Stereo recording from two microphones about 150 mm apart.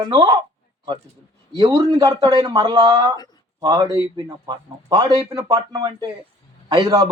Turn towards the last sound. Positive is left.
turn(degrees=-30)  # may be behind; listen again after turning